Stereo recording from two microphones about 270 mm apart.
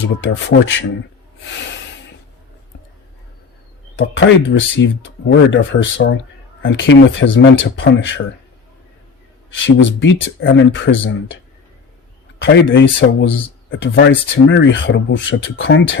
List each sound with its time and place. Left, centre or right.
0.2 s speech: left
3.9 s speech: left
9.6 s speech: left
12.4 s speech: left